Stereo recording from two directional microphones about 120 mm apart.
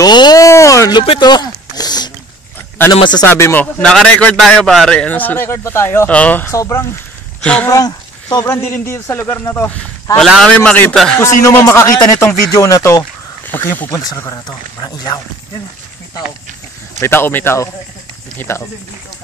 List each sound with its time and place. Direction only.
0.0 s a sound: 35° left (ahead or behind)
1.2 s speech: 35° left (ahead or behind)
3.3 s a man's voice: 20° left (ahead or behind)
8.5 s a man's voice: 20° left (ahead or behind)
10.1 s a man's voice: centre (ahead or behind)
11.1 s a man's voice: 20° left (ahead or behind)
13.5 s a man's voice: 15° left (ahead or behind)
13.9 s speech: 25° left (ahead or behind)
17.0 s a man's voice: 20° left (ahead or behind)